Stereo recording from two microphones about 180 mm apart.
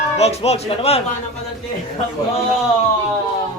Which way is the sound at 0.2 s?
35° left (ahead or behind).